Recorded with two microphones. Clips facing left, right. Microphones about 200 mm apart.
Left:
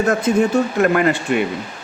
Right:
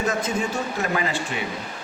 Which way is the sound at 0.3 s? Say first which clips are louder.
Left 10 dB; 65° left (ahead or behind).